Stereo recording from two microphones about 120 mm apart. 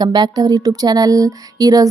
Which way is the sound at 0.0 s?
35° right (ahead or behind).